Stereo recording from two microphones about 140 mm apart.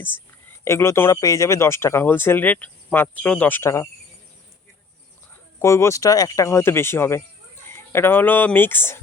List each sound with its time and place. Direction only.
0.6 s speech: 20° left (ahead or behind)
5.5 s speech: 20° left (ahead or behind)